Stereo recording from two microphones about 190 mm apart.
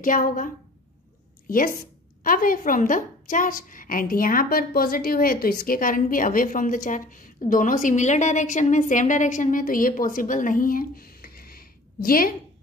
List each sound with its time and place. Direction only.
0.0 s a woman's voice: 45° left (ahead or behind)
1.5 s a woman's voice: 50° left (ahead or behind)